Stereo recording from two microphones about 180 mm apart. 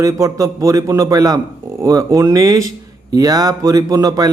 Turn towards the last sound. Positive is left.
turn(degrees=-20)  # may be behind; listen again after turning